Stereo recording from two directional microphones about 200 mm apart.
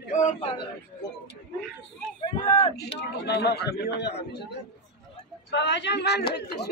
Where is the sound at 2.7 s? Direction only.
55° left (ahead or behind).